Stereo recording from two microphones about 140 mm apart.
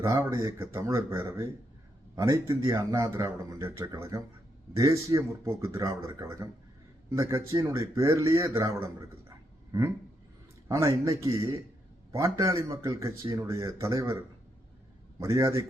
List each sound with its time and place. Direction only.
0.0 s speech: 20° right (ahead or behind)
10.7 s speech: 20° right (ahead or behind)